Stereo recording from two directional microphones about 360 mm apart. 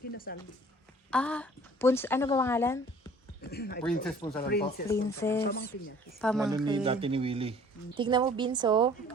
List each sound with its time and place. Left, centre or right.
0.3 s speech: left
1.1 s speech: centre
3.4 s speech: left
4.0 s speech: centre
4.4 s speech: left
5.0 s speech: centre
5.4 s speech: left
6.1 s speech: centre
6.7 s a woman's voice: centre